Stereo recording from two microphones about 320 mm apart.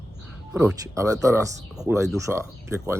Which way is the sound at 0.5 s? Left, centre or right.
Centre.